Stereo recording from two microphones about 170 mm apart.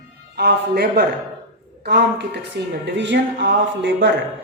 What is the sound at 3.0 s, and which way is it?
Speech, 90° right.